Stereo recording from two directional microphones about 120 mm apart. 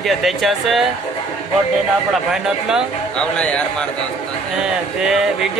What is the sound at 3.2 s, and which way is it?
Speech, 10° left (ahead or behind).